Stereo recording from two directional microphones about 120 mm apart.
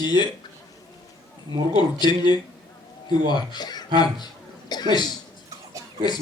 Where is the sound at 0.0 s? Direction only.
35° left (ahead or behind).